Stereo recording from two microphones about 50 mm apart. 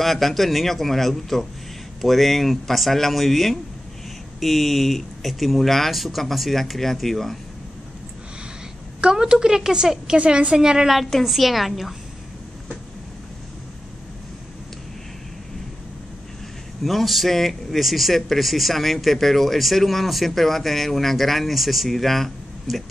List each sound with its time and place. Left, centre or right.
0.0 s speech: centre
9.0 s a woman's voice: centre
10.9 s speech: centre
16.8 s speech: centre